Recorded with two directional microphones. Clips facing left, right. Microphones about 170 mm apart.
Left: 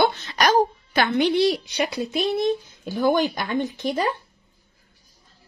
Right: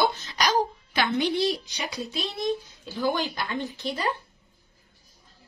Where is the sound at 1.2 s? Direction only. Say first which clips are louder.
Left 6 dB; 75° left (ahead or behind); by 3.5 s 50° left (ahead or behind).